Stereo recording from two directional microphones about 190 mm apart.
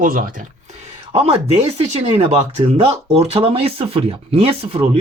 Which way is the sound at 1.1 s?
30° right (ahead or behind).